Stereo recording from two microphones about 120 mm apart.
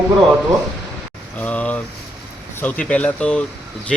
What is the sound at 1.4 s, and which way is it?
Speech, 10° left (ahead or behind).